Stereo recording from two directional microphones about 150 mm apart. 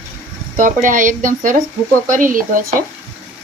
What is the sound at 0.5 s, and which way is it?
Speech, 60° right (ahead or behind).